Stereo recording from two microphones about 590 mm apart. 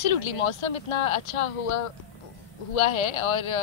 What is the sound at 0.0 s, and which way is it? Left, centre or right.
Speech, left.